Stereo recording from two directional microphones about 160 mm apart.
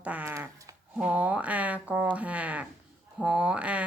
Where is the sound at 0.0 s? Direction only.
10° right (ahead or behind).